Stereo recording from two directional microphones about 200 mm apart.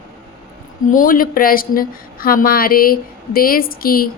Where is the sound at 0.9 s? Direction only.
45° left (ahead or behind).